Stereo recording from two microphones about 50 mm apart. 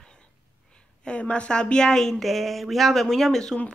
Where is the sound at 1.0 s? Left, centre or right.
Left.